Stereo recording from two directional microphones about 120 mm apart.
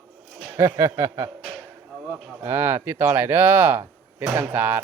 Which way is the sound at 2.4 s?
20° right (ahead or behind).